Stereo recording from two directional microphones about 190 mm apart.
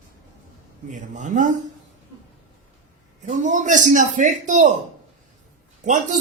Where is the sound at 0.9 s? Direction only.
40° right (ahead or behind).